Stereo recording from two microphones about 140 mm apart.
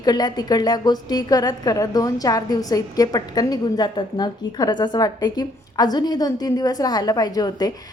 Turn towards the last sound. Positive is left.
turn(degrees=30)  # may be behind; listen again after turning